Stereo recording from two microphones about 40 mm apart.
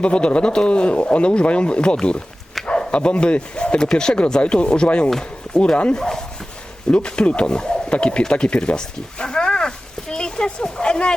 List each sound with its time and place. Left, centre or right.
0.0 s speech: left
2.6 s bow-wow: centre
2.9 s speech: left
6.9 s speech: left